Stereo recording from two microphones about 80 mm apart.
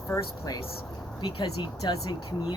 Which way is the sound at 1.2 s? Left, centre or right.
Left.